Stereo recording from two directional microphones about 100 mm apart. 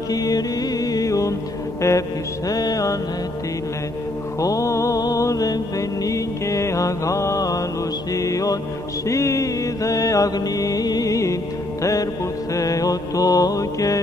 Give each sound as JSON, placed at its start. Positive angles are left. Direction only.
{"t": 0.1, "sound": "mantra", "side_deg": 40}
{"t": 4.4, "sound": "mantra", "side_deg": 35}